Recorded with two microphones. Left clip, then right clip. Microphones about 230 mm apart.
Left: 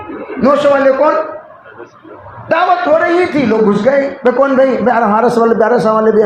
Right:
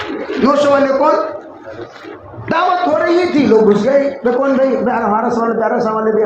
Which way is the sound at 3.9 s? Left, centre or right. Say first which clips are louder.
Left 1 dB; left.